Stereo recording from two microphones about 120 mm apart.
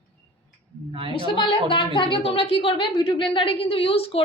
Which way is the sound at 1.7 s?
45° left (ahead or behind).